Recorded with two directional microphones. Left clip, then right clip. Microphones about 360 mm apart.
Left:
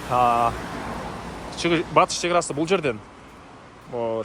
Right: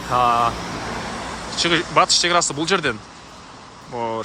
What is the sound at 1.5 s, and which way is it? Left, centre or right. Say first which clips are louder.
Speech: right 2 dB; centre.